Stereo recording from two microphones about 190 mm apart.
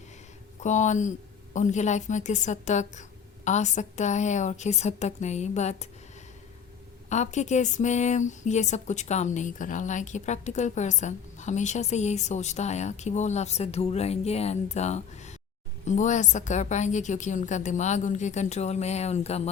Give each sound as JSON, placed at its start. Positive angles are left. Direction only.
{"t": 0.6, "sound": "speech", "side_deg": 40}
{"t": 7.1, "sound": "speech", "side_deg": 40}